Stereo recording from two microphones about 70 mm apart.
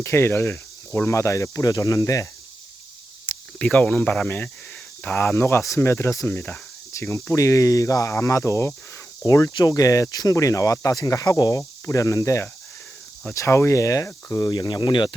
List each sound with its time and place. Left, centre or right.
0.0 s speech: left
3.3 s cricket: left
3.6 s speech: centre
5.1 s speech: left
9.2 s speech: left